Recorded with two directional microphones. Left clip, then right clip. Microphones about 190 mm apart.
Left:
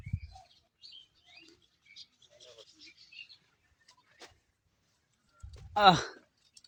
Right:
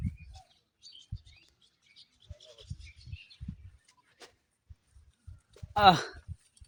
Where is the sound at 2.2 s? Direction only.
40° right (ahead or behind).